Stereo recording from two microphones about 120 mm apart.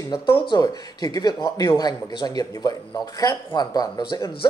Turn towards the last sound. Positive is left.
turn(degrees=35)  # may be behind; listen again after turning